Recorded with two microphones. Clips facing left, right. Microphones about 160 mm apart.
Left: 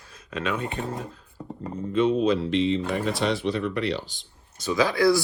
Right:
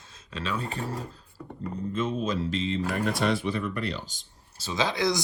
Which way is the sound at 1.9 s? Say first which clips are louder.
Left 8 dB; 45° right (ahead or behind).